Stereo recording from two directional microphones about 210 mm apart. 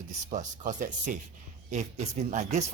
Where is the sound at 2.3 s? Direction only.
35° right (ahead or behind).